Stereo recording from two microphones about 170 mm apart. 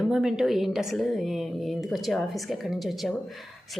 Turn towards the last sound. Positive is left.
turn(degrees=0)  # may be behind; listen again after turning